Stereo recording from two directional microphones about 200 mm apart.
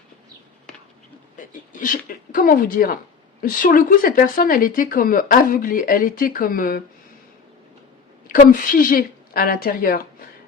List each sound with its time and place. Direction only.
1.4 s speech: 40° left (ahead or behind)
8.4 s speech: 45° left (ahead or behind)